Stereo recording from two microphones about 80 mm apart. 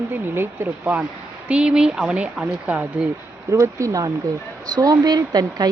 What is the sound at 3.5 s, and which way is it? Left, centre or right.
Speech, right.